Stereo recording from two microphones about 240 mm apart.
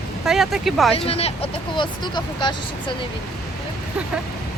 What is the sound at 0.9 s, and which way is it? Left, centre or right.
Speech, left.